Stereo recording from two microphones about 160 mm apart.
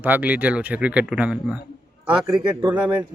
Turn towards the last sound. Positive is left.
turn(degrees=-10)  # may be behind; listen again after turning